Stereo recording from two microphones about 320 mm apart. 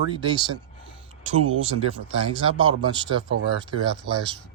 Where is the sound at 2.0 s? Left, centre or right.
Centre.